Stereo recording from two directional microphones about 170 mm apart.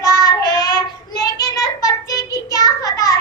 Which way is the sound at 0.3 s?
20° left (ahead or behind).